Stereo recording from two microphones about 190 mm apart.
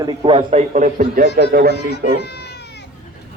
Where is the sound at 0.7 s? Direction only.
45° right (ahead or behind).